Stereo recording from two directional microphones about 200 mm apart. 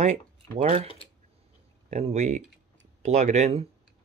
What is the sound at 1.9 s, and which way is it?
Speech, 35° right (ahead or behind).